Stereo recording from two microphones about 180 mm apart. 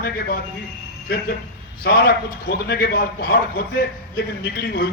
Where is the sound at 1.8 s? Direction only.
60° left (ahead or behind).